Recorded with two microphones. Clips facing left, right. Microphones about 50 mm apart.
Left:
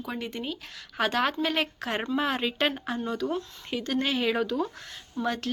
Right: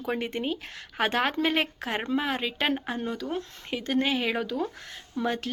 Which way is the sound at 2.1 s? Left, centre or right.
Centre.